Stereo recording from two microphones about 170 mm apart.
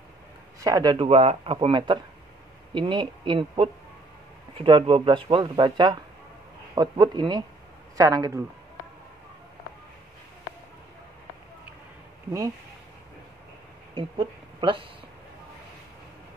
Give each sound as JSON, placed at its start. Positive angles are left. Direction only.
{"t": 0.7, "sound": "speech", "side_deg": -25}
{"t": 13.9, "sound": "speech", "side_deg": -30}